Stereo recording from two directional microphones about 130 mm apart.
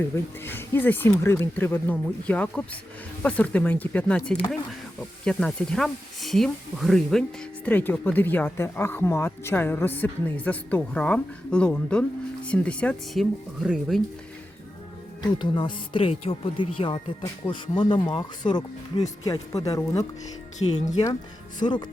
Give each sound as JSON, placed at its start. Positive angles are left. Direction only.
{"t": 0.0, "sound": "speech", "side_deg": 15}
{"t": 13.6, "sound": "speech", "side_deg": -5}
{"t": 15.2, "sound": "speech", "side_deg": 35}
{"t": 20.6, "sound": "speech", "side_deg": 60}
{"t": 21.6, "sound": "speech", "side_deg": 35}